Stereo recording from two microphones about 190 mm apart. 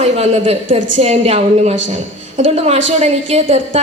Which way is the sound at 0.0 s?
35° right (ahead or behind).